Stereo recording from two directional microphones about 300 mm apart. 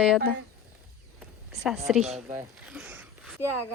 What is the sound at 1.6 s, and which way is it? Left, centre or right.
A woman's voice, centre.